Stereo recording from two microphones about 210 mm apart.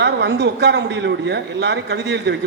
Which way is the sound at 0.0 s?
55° right (ahead or behind).